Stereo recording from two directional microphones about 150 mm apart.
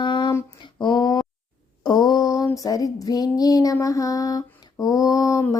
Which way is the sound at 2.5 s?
20° left (ahead or behind).